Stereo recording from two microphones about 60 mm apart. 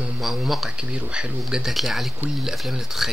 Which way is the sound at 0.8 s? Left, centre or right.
Centre.